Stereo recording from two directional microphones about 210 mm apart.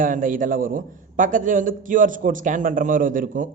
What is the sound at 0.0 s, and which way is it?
A man's voice, 40° right (ahead or behind).